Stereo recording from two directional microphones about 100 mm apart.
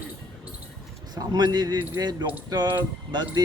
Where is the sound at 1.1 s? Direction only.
45° right (ahead or behind).